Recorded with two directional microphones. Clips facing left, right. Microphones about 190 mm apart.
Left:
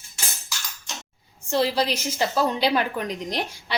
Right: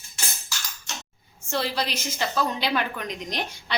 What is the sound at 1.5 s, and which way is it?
A woman's voice, 30° left (ahead or behind).